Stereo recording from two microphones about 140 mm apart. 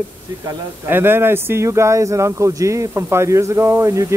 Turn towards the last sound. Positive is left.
turn(degrees=-20)  # may be behind; listen again after turning